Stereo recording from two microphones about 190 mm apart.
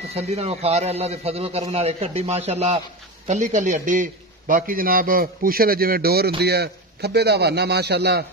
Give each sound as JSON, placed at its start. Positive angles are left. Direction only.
{"t": 0.1, "sound": "a man's voice", "side_deg": -35}